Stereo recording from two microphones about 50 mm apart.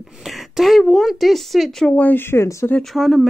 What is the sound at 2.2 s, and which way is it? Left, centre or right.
Speech, left.